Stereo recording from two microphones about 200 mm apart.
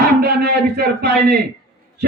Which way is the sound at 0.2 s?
50° right (ahead or behind).